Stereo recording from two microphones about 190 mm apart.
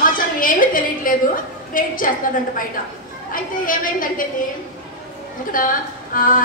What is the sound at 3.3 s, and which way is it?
Speech, 45° left (ahead or behind).